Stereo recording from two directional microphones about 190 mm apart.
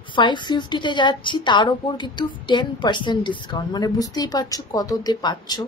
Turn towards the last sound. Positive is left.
turn(degrees=20)  # may be behind; listen again after turning